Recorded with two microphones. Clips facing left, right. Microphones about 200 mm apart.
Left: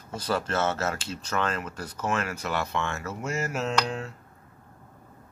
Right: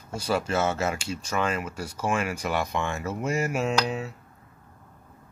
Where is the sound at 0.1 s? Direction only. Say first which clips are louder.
Right 2 dB; 10° right (ahead or behind).